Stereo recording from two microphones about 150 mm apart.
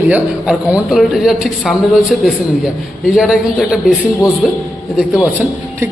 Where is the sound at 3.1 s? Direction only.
Centre (ahead or behind).